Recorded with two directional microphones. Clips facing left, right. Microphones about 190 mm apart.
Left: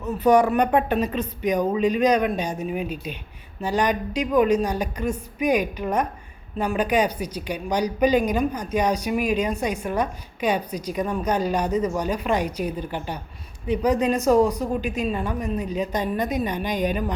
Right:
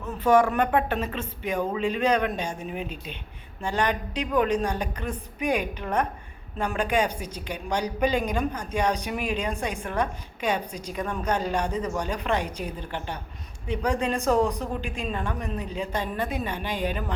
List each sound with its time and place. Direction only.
0.0 s a woman's voice: 15° left (ahead or behind)
14.3 s a woman's voice: 10° left (ahead or behind)